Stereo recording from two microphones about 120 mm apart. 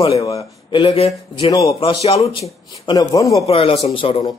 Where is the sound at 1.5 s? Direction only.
30° left (ahead or behind).